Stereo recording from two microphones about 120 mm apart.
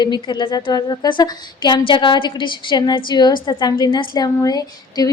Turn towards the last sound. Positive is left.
turn(degrees=30)  # may be behind; listen again after turning